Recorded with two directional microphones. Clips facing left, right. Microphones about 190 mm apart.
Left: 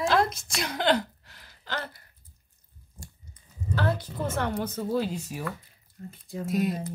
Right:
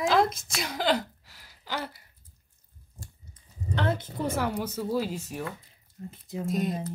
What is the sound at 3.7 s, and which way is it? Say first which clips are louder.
Speech: even; 20° right (ahead or behind).